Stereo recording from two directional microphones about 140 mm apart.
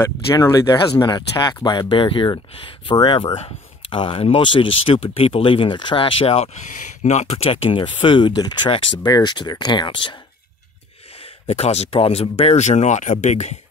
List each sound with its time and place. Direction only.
0.0 s speech: 20° left (ahead or behind); by 6.5 s 45° left (ahead or behind)
6.7 s speech: 65° left (ahead or behind); by 10.1 s 35° left (ahead or behind)
11.4 s speech: 50° left (ahead or behind)